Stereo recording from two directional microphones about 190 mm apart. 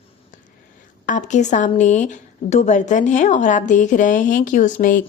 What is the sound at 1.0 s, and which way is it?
A woman's voice, 40° left (ahead or behind).